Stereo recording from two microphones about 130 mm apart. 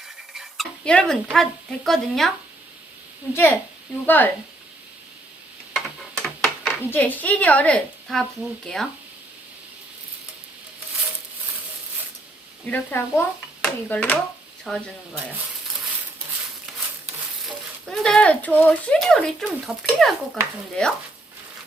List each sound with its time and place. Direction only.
0.3 s speech: centre (ahead or behind)
4.0 s a woman's voice: 15° left (ahead or behind)
5.7 s a sound: centre (ahead or behind)
6.9 s a woman's voice: 15° left (ahead or behind)
12.6 s a woman's voice: 15° left (ahead or behind)
17.8 s a woman's voice: 5° left (ahead or behind)